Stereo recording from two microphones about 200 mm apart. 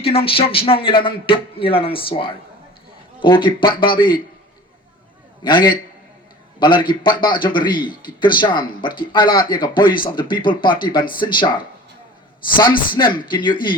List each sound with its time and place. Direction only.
0.0 s speech: 30° left (ahead or behind)
5.4 s a man's voice: 20° left (ahead or behind)
13.0 s speech: 20° left (ahead or behind)